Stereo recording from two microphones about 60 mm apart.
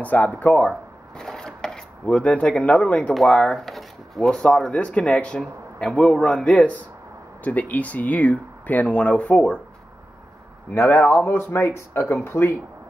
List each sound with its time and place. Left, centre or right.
0.0 s speech: left
0.6 s shuffling cards: centre; by 3.0 s left
3.2 s speech: centre
4.3 s a man's voice: centre
10.7 s speech: left
11.0 s speech: left
11.2 s speech: left